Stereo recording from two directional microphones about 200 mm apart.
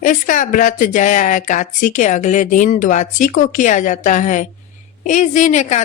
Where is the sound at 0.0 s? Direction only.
40° left (ahead or behind).